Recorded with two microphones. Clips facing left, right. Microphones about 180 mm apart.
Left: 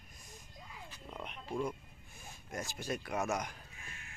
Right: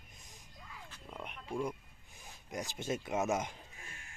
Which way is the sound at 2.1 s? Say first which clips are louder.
Right 1 dB; 15° right (ahead or behind).